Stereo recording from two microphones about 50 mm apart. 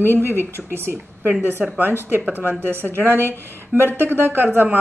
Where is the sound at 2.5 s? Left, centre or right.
Right.